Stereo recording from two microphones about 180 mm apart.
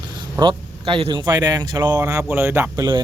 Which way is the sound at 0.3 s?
25° right (ahead or behind).